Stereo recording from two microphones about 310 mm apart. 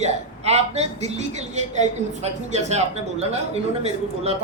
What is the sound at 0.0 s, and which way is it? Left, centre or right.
Speech, right.